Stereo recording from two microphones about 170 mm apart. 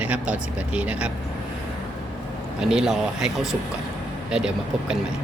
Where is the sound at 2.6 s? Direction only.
5° right (ahead or behind).